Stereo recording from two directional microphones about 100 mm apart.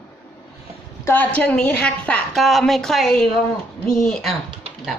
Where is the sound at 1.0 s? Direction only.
20° left (ahead or behind).